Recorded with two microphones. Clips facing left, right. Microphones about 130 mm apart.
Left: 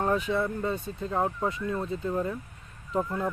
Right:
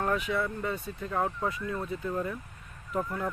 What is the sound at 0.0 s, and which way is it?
Speech, 30° left (ahead or behind).